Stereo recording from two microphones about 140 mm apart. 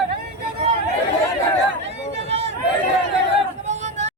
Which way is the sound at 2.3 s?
50° right (ahead or behind).